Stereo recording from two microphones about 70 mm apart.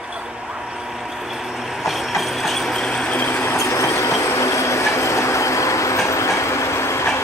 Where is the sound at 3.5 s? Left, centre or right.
Left.